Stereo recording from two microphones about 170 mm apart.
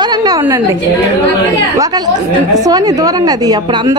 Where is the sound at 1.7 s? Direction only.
20° right (ahead or behind).